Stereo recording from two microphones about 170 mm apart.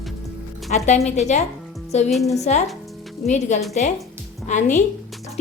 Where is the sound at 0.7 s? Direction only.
40° left (ahead or behind).